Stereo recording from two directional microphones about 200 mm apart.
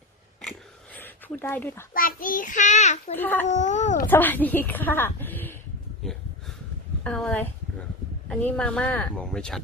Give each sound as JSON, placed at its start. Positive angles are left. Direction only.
{"t": 0.9, "sound": "speech", "side_deg": 10}
{"t": 1.9, "sound": "a child's voice", "side_deg": 45}
{"t": 3.2, "sound": "a woman's voice", "side_deg": 10}
{"t": 3.4, "sound": "a child's voice", "side_deg": 35}
{"t": 4.0, "sound": "a woman's voice", "side_deg": 10}
{"t": 7.0, "sound": "a woman's voice", "side_deg": 5}